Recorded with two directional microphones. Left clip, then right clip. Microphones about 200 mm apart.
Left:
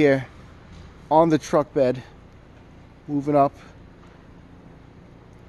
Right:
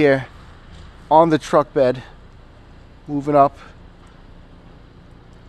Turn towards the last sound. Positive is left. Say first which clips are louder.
# right 5 dB
turn(degrees=-15)  # may be behind; listen again after turning